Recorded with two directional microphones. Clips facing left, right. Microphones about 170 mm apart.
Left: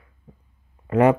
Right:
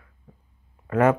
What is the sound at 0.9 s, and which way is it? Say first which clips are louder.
Speech: left 3 dB; 15° left (ahead or behind).